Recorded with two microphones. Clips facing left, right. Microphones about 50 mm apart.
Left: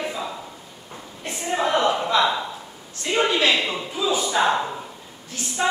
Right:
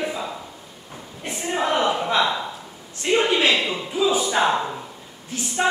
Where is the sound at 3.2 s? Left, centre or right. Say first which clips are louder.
Right 1 dB; right.